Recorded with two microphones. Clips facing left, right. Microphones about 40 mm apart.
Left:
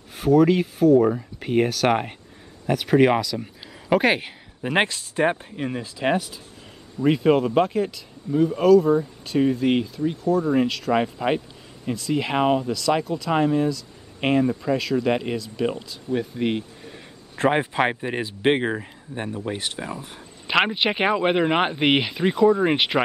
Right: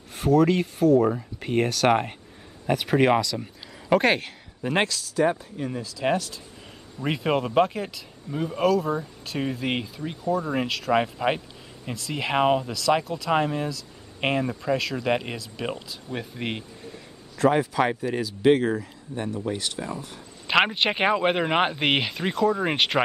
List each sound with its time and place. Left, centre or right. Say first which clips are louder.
0.1 s speech: left 3 dB; centre; by 5.9 s left
5.9 s speech: left 1 dB; left
7.0 s speech: left 6 dB; centre
17.4 s speech: left 1 dB; left
20.4 s speech: left 1 dB; centre